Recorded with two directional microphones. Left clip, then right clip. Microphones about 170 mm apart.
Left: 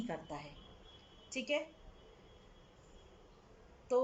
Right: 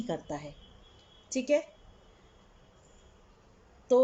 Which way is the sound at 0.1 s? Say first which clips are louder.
Right 8 dB; 20° right (ahead or behind).